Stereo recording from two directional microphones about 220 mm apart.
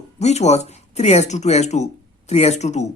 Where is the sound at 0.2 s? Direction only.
30° left (ahead or behind).